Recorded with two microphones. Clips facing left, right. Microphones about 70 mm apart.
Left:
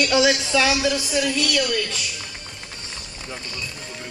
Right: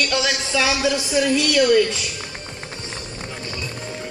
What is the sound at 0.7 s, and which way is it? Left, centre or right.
A woman's voice, right.